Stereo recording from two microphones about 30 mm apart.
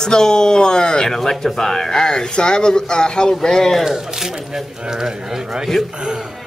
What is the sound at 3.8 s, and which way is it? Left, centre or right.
A man's voice, centre.